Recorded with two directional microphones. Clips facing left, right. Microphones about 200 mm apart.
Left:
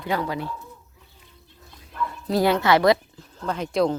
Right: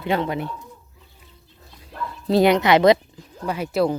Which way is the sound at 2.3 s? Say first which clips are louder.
Right 4 dB; 20° right (ahead or behind).